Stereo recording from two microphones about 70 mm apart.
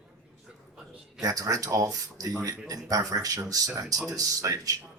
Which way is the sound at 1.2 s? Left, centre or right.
Right.